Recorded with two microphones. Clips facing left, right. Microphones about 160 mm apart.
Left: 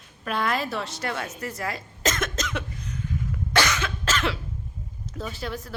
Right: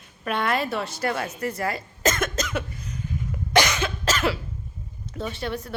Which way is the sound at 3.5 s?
15° right (ahead or behind).